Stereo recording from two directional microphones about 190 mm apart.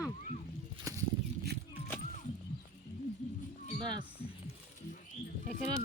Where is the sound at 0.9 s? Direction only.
20° right (ahead or behind).